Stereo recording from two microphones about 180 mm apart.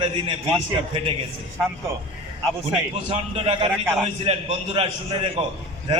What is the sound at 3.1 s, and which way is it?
A man's voice, 30° right (ahead or behind).